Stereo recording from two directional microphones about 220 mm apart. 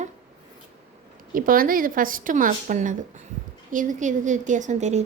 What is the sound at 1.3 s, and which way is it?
Speech, 40° right (ahead or behind).